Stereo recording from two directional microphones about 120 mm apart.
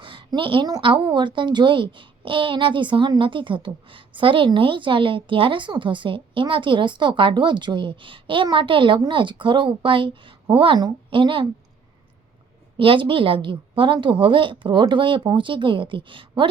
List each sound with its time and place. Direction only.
0.0 s a sound: 40° right (ahead or behind)
0.8 s a child's voice: 45° right (ahead or behind)
12.7 s a child's voice: 45° right (ahead or behind)